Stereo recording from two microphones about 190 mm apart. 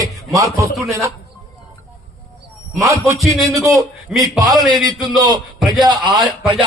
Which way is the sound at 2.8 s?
15° right (ahead or behind).